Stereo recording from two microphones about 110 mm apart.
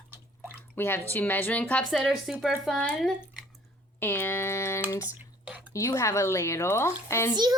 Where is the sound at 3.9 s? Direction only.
20° left (ahead or behind).